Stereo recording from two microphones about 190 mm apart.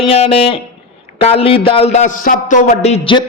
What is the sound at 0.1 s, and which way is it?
A man's voice, 30° left (ahead or behind).